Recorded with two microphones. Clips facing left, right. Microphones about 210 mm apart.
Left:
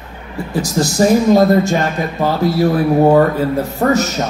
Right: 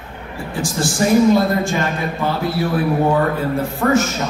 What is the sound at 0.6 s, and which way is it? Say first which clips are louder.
A man's voice: left 4 dB; 40° left (ahead or behind).